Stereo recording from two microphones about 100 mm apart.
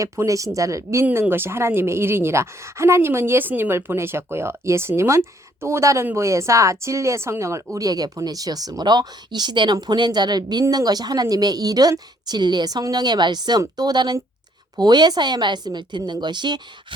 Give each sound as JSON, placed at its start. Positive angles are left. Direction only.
{"t": 0.0, "sound": "speech", "side_deg": -35}